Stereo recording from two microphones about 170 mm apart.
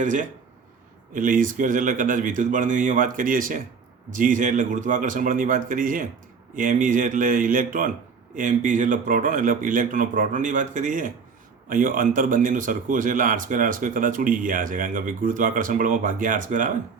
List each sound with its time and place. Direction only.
0.0 s speech: 50° right (ahead or behind)